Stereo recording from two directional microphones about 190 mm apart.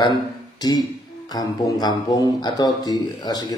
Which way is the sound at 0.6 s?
20° left (ahead or behind).